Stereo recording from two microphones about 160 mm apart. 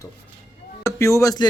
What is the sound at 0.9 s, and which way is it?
Speech, 20° left (ahead or behind).